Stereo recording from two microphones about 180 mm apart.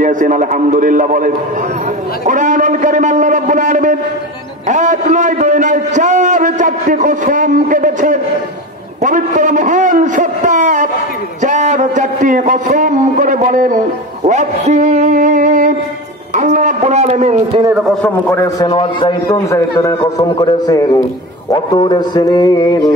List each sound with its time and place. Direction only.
0.0 s a man's voice: 45° right (ahead or behind)
17.7 s a man's voice: centre (ahead or behind)
18.3 s a man's voice: 20° left (ahead or behind)